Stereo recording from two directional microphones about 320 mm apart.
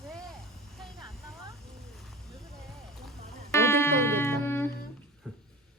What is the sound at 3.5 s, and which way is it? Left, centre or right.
Music, centre.